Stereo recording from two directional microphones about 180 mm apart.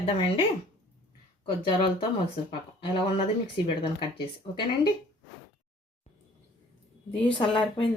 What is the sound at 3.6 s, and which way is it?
Speech, 30° left (ahead or behind).